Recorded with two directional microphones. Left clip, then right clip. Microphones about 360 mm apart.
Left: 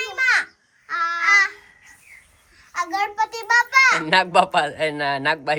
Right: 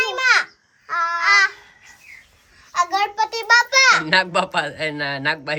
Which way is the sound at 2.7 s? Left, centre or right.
Right.